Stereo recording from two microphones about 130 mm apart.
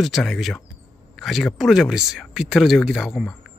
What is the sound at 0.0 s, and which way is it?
Speech, centre (ahead or behind).